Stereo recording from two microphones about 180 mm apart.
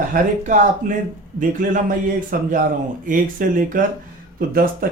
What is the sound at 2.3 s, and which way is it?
Speech, 50° right (ahead or behind).